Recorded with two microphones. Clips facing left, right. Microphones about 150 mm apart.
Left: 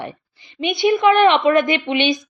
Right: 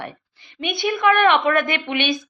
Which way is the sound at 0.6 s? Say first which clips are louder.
Left 4 dB; 50° right (ahead or behind).